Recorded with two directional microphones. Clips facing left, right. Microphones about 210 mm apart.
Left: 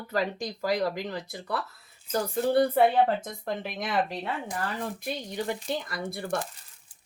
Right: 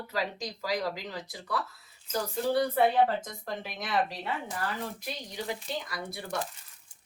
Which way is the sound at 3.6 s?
55° left (ahead or behind).